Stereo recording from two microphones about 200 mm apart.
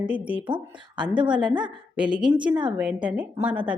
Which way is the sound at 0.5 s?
25° right (ahead or behind).